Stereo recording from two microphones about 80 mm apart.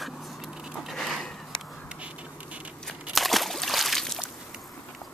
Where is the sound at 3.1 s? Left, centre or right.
Centre.